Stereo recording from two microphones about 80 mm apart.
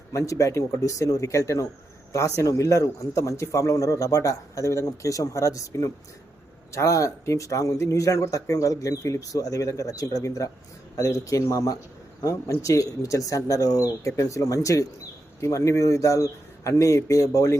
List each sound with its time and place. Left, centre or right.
0.1 s a man's voice: left